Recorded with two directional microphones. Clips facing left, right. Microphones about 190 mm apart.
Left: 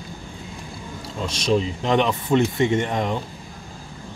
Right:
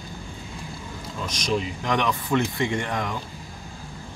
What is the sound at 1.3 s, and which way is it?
Speech, 25° left (ahead or behind).